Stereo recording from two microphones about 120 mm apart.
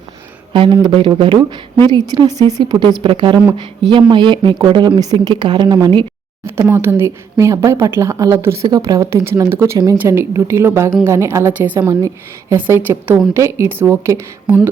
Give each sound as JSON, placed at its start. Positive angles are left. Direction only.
{"t": 0.5, "sound": "speech", "side_deg": -40}
{"t": 1.9, "sound": "a woman's voice", "side_deg": -35}
{"t": 6.4, "sound": "a woman's voice", "side_deg": -20}
{"t": 11.8, "sound": "a woman's voice", "side_deg": -25}